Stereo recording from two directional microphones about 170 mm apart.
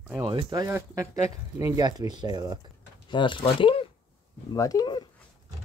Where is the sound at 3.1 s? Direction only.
30° left (ahead or behind).